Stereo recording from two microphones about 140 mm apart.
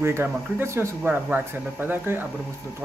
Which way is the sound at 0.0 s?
15° right (ahead or behind).